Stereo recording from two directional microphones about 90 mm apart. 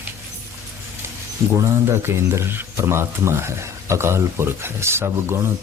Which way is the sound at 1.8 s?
30° right (ahead or behind).